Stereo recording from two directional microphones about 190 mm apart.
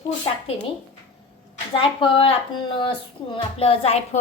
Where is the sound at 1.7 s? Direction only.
25° left (ahead or behind).